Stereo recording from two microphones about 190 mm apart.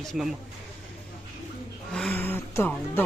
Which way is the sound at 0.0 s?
Centre (ahead or behind).